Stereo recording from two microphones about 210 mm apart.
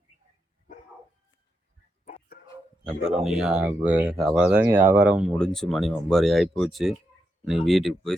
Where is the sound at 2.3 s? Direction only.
45° left (ahead or behind).